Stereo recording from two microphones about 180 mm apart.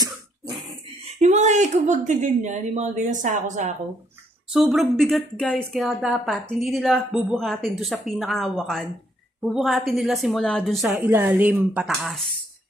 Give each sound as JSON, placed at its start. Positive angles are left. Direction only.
{"t": 1.2, "sound": "a woman's voice", "side_deg": -40}
{"t": 4.5, "sound": "a woman's voice", "side_deg": -5}
{"t": 11.0, "sound": "speech", "side_deg": -10}